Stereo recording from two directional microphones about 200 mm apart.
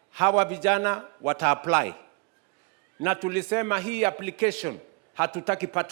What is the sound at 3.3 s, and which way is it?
A man's voice, 5° left (ahead or behind).